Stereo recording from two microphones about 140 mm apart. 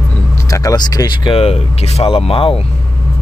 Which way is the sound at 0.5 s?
25° left (ahead or behind).